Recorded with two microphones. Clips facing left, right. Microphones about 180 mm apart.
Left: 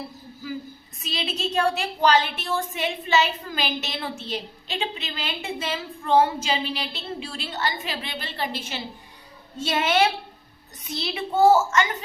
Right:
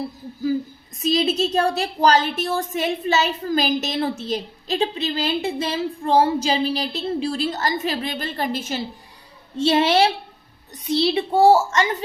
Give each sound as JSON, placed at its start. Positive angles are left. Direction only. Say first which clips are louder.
{"t": 1.0, "sound": "a woman's voice", "louder": "right 10 dB", "side_deg": -40}
{"t": 9.6, "sound": "a woman's voice", "louder": "right 5 dB", "side_deg": -30}